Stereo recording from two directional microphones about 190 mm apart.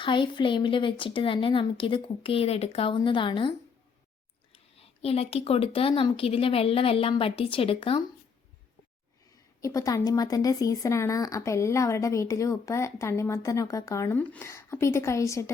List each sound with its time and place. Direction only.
0.0 s speech: 25° left (ahead or behind)
4.5 s speech: 30° left (ahead or behind)
9.6 s a woman's voice: 15° left (ahead or behind)